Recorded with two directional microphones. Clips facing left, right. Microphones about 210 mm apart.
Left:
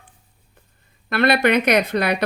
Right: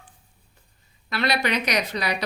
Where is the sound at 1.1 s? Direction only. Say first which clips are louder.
Left 8 dB; 55° left (ahead or behind).